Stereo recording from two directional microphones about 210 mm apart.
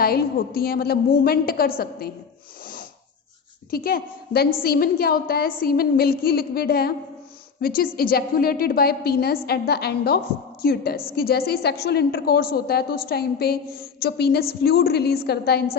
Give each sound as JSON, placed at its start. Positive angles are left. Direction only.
{"t": 0.0, "sound": "a woman's voice", "side_deg": 45}
{"t": 3.7, "sound": "a woman's voice", "side_deg": 45}
{"t": 7.9, "sound": "a woman's voice", "side_deg": 45}